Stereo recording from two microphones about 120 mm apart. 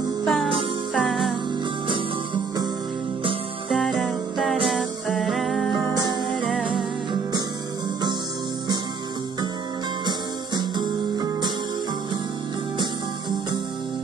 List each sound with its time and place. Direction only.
0.2 s music: centre (ahead or behind)
1.9 s music: 35° right (ahead or behind)
3.7 s music: centre (ahead or behind)
10.0 s music: 35° right (ahead or behind)